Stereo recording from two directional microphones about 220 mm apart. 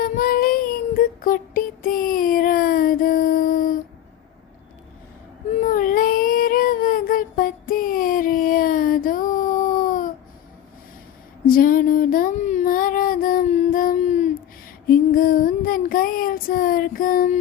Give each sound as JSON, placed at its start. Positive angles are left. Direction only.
{"t": 0.0, "sound": "child singing", "side_deg": 40}
{"t": 5.6, "sound": "child singing", "side_deg": 40}
{"t": 11.4, "sound": "female singing", "side_deg": 40}